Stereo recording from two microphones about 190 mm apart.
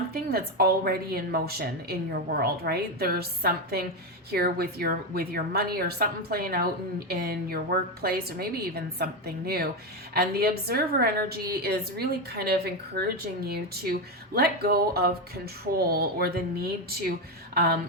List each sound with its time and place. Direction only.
0.1 s a woman's voice: 55° right (ahead or behind)